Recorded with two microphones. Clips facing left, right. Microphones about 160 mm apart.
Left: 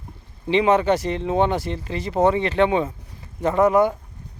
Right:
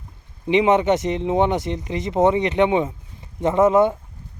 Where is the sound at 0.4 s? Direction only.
20° right (ahead or behind).